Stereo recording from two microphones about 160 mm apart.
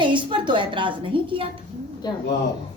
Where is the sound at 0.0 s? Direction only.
30° right (ahead or behind).